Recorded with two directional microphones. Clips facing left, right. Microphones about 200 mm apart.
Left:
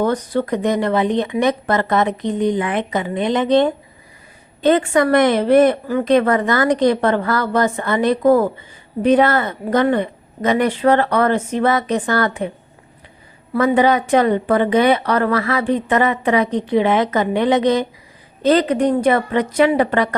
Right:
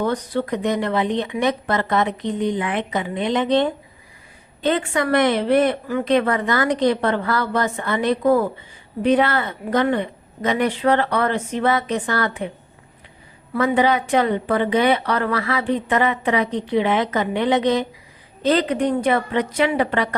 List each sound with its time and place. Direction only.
0.0 s a woman's voice: 45° left (ahead or behind)
13.6 s a woman's voice: 45° left (ahead or behind)